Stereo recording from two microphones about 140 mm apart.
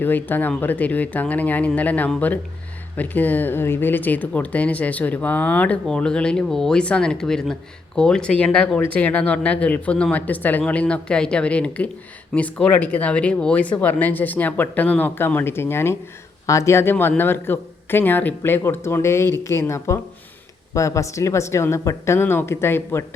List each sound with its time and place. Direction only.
0.0 s a woman's voice: 15° left (ahead or behind)